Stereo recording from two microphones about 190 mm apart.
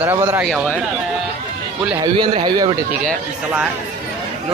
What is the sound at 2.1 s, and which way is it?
Speech, 25° right (ahead or behind).